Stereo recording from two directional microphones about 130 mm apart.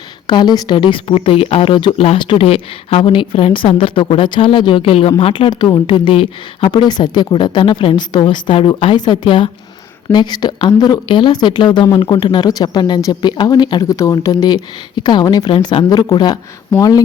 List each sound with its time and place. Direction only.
0.3 s a woman's voice: 35° left (ahead or behind)